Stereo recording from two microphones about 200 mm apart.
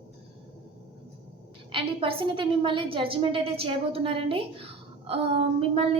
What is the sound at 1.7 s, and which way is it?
A woman's voice, 25° right (ahead or behind).